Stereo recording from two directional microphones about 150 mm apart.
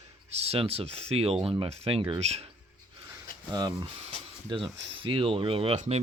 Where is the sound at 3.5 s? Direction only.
30° right (ahead or behind); by 6.0 s 50° right (ahead or behind).